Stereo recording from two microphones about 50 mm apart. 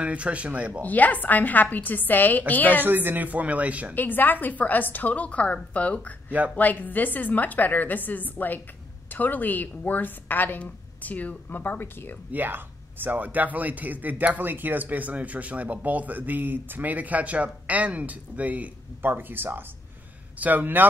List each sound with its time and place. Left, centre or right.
0.0 s speech: right
0.8 s a woman's voice: left
2.8 s speech: right
3.9 s a woman's voice: left
12.3 s speech: right
19.0 s speech: right